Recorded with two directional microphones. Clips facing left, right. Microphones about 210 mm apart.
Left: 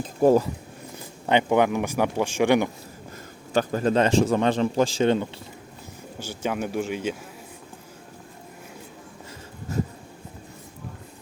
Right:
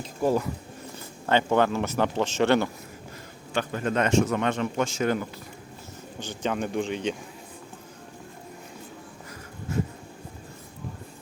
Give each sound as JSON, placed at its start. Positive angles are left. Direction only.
{"t": 0.0, "sound": "speech", "side_deg": 45}
{"t": 1.3, "sound": "speech", "side_deg": 15}
{"t": 3.5, "sound": "a man's voice", "side_deg": 40}
{"t": 6.1, "sound": "speech", "side_deg": 10}